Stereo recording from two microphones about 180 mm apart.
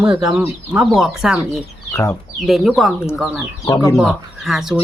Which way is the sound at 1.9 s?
15° left (ahead or behind).